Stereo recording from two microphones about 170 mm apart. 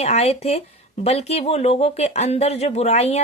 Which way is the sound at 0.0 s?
40° left (ahead or behind).